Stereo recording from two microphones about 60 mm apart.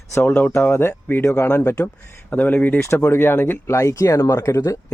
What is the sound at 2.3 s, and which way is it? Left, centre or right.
Speech, left.